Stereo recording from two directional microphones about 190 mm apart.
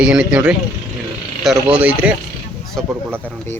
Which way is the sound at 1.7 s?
5° right (ahead or behind).